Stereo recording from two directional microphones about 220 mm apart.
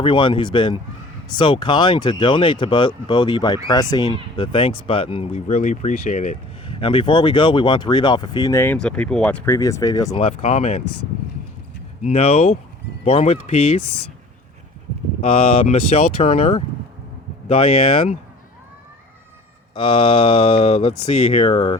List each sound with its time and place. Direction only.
0.0 s speech: 20° left (ahead or behind)
10.2 s speech: 30° left (ahead or behind)
12.0 s speech: 30° left (ahead or behind)
13.8 s speech: 90° left
15.2 s speech: 25° left (ahead or behind)
19.7 s speech: 25° left (ahead or behind)